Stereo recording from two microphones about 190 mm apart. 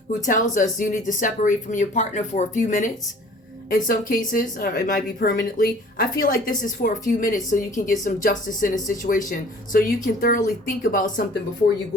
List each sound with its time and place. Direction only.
0.3 s a woman's voice: 40° left (ahead or behind)